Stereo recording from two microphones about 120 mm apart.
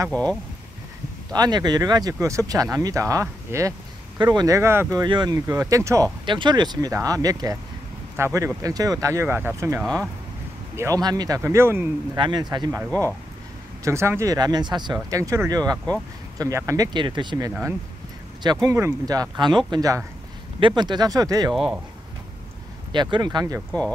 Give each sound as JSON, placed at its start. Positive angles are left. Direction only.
{"t": 0.1, "sound": "speech", "side_deg": 10}
{"t": 1.3, "sound": "speech", "side_deg": -35}
{"t": 4.6, "sound": "speech", "side_deg": -20}
{"t": 5.0, "sound": "speech", "side_deg": -35}
{"t": 6.2, "sound": "speech", "side_deg": -40}
{"t": 10.8, "sound": "speech", "side_deg": -30}
{"t": 12.2, "sound": "speech", "side_deg": -35}
{"t": 13.8, "sound": "speech", "side_deg": -20}
{"t": 17.5, "sound": "speech", "side_deg": -15}
{"t": 18.4, "sound": "speech", "side_deg": -30}
{"t": 19.3, "sound": "speech", "side_deg": -40}
{"t": 22.9, "sound": "speech", "side_deg": -40}